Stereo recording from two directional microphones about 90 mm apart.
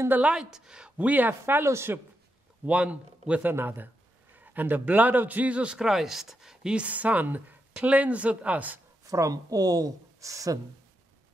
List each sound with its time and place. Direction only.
0.1 s a man's voice: 10° right (ahead or behind); by 2.0 s 30° right (ahead or behind)
2.6 s a man's voice: 15° right (ahead or behind)
9.0 s speech: 40° right (ahead or behind)